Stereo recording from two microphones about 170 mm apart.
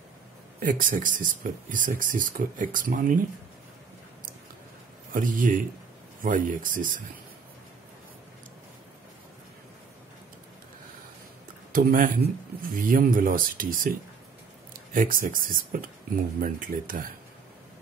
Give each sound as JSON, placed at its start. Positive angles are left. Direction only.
{"t": 0.6, "sound": "speech", "side_deg": -55}
{"t": 5.1, "sound": "speech", "side_deg": -55}
{"t": 11.7, "sound": "speech", "side_deg": -55}